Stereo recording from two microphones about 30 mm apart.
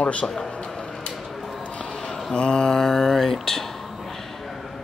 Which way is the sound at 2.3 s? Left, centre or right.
Left.